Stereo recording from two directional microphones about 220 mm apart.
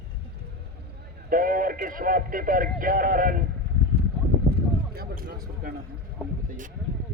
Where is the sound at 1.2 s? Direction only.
40° right (ahead or behind).